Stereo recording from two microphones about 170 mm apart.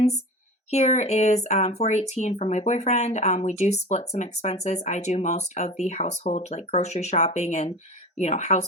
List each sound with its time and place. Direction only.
0.7 s speech: 45° left (ahead or behind)